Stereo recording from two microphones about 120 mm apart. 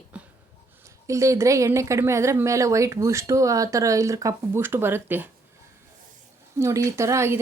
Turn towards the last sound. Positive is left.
turn(degrees=-25)  # may be behind; listen again after turning